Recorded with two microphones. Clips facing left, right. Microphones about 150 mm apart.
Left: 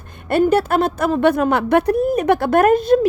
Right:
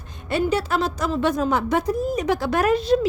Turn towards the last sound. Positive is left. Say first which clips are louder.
# left 6 dB
turn(degrees=50)  # may be behind; listen again after turning